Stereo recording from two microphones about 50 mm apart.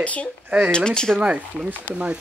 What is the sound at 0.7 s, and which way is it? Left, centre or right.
Speech, centre.